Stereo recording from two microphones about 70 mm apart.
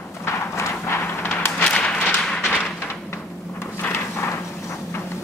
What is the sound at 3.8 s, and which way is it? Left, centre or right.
Vehicle, left.